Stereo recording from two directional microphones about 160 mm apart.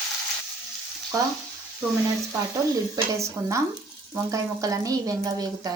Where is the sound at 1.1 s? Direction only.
20° right (ahead or behind).